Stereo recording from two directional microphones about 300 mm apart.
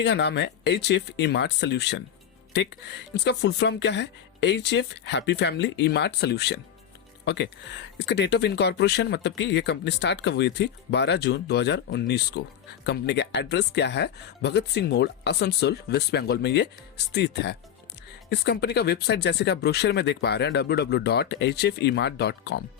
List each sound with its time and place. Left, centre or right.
0.0 s speech: left